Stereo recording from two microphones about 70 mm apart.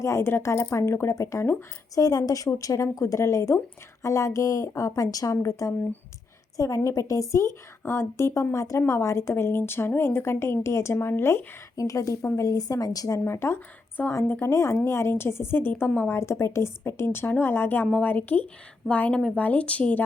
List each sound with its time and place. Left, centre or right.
0.0 s a woman's voice: left
2.0 s a woman's voice: left
8.5 s a woman's voice: left
9.4 s a woman's voice: left
11.8 s a woman's voice: left
13.1 s a woman's voice: left; by 20.0 s centre